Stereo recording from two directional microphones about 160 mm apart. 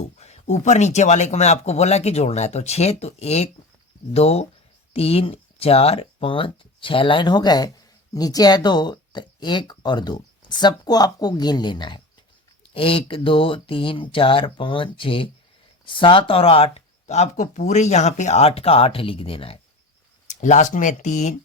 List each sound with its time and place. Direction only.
0.2 s speech: 45° left (ahead or behind)
20.2 s speech: 50° left (ahead or behind)